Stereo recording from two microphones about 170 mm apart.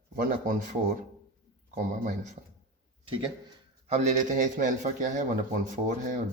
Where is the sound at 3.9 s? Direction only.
45° right (ahead or behind).